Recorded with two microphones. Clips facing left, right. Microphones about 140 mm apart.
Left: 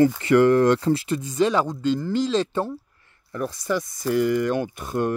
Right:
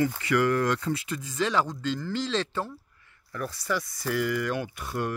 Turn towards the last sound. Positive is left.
turn(degrees=25)  # may be behind; listen again after turning